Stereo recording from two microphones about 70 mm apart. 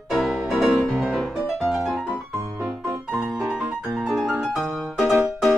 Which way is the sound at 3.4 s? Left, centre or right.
Centre.